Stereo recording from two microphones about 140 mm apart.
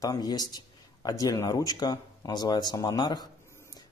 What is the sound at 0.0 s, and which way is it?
Speech, 25° left (ahead or behind).